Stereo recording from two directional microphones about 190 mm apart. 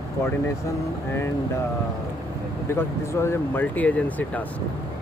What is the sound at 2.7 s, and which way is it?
Speech, 15° left (ahead or behind).